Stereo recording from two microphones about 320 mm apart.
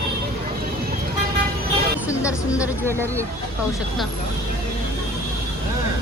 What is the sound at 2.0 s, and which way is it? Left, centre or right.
Speech, centre.